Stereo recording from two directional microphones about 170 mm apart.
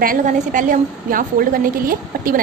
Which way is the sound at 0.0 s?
50° right (ahead or behind).